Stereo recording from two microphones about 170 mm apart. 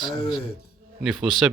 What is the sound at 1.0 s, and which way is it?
Speech, 5° right (ahead or behind).